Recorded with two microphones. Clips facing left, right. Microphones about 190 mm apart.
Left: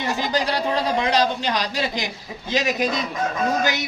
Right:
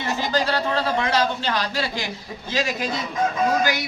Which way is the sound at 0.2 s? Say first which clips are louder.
Right 2 dB; 15° left (ahead or behind).